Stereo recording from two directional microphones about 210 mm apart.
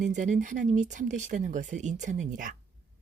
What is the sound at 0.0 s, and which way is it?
Speech, 35° right (ahead or behind).